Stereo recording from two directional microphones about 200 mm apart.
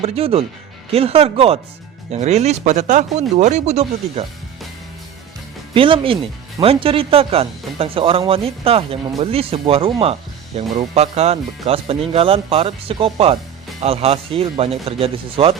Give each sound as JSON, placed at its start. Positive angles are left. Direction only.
{"t": 0.0, "sound": "speech", "side_deg": -30}
{"t": 5.7, "sound": "speech", "side_deg": -25}